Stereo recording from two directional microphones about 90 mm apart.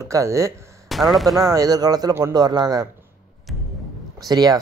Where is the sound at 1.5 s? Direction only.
45° right (ahead or behind).